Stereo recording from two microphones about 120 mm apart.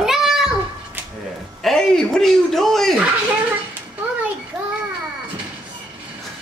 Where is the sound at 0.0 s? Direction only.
5° right (ahead or behind).